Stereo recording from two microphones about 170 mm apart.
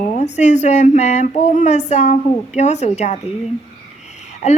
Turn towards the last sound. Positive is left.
turn(degrees=45)  # may be behind; listen again after turning